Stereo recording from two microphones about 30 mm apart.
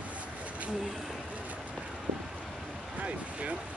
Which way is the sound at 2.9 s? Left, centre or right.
Right.